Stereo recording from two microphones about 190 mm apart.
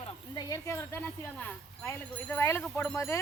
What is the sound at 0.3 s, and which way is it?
Speech, 20° left (ahead or behind).